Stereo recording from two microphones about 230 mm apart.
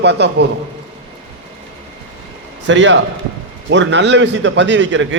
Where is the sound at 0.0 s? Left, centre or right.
Right.